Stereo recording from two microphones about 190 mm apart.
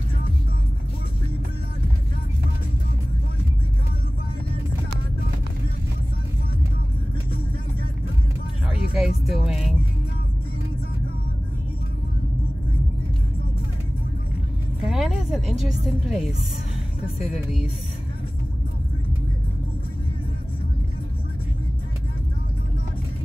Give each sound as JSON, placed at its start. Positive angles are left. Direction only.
{"t": 8.9, "sound": "music", "side_deg": 0}
{"t": 14.9, "sound": "a sound", "side_deg": 0}
{"t": 15.8, "sound": "speech", "side_deg": 0}